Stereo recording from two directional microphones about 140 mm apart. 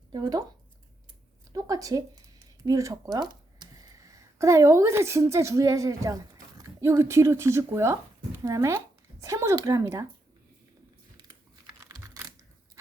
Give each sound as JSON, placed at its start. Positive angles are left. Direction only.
{"t": 0.1, "sound": "speech", "side_deg": -30}
{"t": 1.5, "sound": "speech", "side_deg": -25}
{"t": 11.8, "sound": "a sound", "side_deg": -25}